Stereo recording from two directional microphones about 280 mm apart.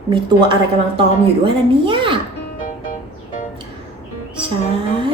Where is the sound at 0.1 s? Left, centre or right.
Centre.